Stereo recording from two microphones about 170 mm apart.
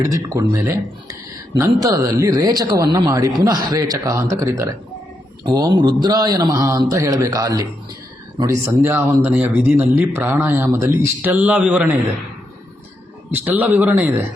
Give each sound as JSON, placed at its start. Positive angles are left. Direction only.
{"t": 0.0, "sound": "speech", "side_deg": -20}
{"t": 13.3, "sound": "speech", "side_deg": -10}